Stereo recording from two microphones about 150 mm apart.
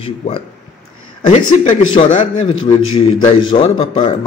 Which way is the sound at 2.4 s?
30° left (ahead or behind).